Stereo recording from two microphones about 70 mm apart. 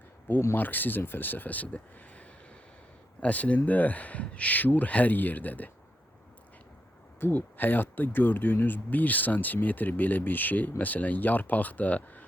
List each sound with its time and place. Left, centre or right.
0.5 s speech: left
7.2 s speech: left